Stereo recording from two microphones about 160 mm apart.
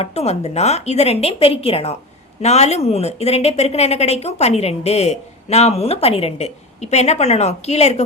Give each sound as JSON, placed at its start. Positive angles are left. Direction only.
{"t": 0.0, "sound": "speech", "side_deg": 40}